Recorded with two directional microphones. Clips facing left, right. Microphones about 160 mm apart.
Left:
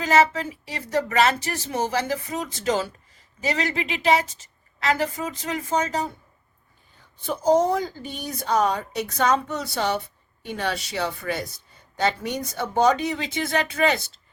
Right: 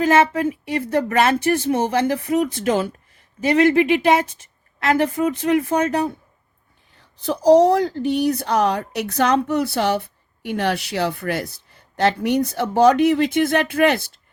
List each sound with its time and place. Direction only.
0.0 s speech: 55° right (ahead or behind)
7.3 s speech: 75° right (ahead or behind)